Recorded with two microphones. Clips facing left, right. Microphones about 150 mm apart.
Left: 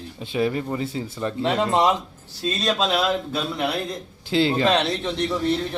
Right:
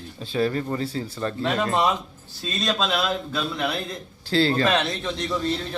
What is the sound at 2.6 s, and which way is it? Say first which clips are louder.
Speech: left 2 dB; 10° left (ahead or behind).